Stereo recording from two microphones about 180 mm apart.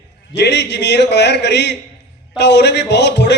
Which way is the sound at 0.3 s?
70° left (ahead or behind).